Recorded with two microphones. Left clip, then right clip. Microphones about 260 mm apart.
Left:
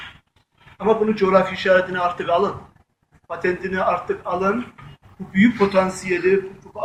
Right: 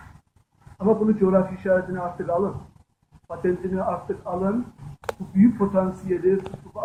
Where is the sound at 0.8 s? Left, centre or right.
Centre.